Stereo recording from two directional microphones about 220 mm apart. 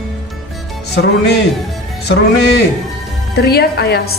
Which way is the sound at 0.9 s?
50° left (ahead or behind).